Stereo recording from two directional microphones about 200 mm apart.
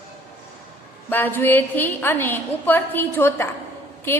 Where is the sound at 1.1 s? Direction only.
10° left (ahead or behind).